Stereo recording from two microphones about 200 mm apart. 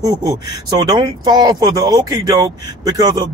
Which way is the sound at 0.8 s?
20° right (ahead or behind).